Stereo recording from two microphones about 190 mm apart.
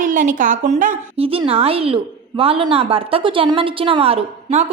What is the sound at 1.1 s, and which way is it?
A woman's voice, 30° right (ahead or behind).